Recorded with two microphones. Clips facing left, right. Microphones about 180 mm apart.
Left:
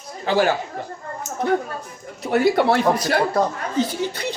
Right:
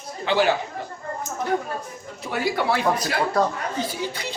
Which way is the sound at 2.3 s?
55° left (ahead or behind).